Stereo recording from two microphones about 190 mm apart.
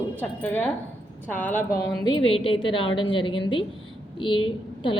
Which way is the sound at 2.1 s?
25° left (ahead or behind).